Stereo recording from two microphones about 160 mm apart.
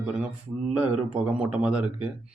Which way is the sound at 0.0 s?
5° right (ahead or behind).